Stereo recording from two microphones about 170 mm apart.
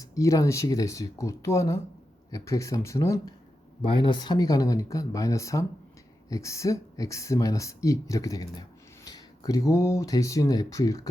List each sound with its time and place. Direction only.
0.0 s speech: 20° left (ahead or behind)
3.8 s speech: 30° left (ahead or behind)